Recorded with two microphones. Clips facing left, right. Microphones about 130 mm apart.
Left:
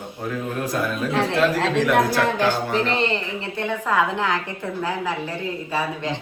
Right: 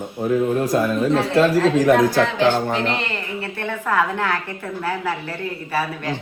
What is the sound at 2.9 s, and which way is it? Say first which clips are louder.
Speech: left 3 dB; 30° left (ahead or behind).